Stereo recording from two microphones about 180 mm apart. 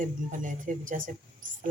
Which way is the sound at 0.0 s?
45° right (ahead or behind).